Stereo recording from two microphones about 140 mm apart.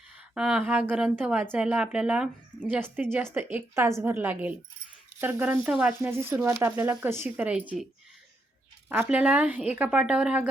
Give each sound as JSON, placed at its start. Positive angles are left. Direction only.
{"t": 0.3, "sound": "a woman's voice", "side_deg": -5}
{"t": 8.9, "sound": "a woman's voice", "side_deg": -10}